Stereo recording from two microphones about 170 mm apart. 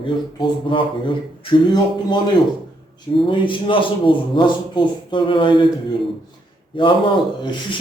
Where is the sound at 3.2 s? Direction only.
30° left (ahead or behind).